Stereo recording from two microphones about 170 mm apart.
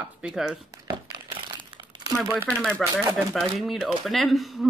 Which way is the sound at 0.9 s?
30° right (ahead or behind).